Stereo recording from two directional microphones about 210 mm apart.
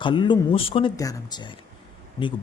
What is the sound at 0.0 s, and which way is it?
Speech, 20° left (ahead or behind).